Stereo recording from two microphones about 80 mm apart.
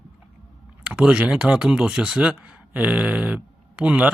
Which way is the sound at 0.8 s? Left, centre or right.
Centre.